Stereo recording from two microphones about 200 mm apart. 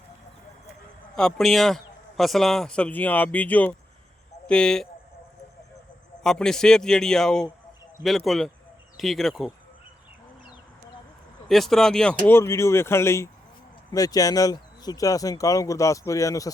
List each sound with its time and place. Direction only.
1.1 s a man's voice: centre (ahead or behind)
6.2 s a man's voice: 5° left (ahead or behind)
11.4 s speech: centre (ahead or behind)